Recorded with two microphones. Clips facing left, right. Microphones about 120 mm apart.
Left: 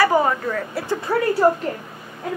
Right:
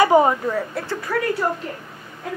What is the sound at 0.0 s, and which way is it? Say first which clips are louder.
Speech: right 3 dB; 20° right (ahead or behind).